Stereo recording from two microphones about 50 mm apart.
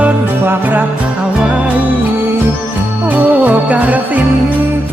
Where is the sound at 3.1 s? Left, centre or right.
Right.